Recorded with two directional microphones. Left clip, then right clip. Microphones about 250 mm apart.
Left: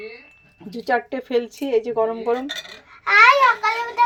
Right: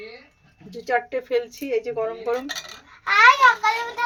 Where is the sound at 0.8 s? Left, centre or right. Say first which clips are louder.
Left 1 dB; centre.